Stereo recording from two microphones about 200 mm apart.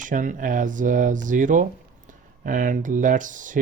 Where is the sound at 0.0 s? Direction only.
40° right (ahead or behind).